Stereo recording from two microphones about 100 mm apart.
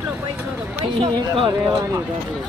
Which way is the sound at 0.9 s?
60° right (ahead or behind).